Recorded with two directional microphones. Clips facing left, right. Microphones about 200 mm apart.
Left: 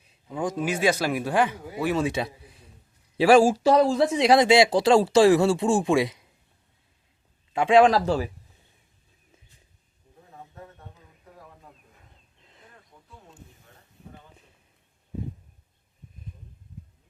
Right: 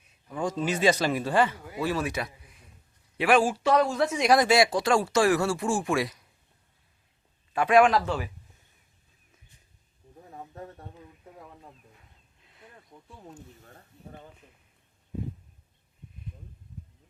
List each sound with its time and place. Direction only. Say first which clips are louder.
0.3 s speech: left 1 dB; 15° left (ahead or behind)
7.5 s speech: left 3 dB; 25° left (ahead or behind)
10.5 s a sound: right 4 dB; 40° right (ahead or behind)